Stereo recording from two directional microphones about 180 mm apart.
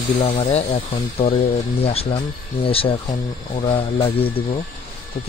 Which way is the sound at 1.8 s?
35° left (ahead or behind).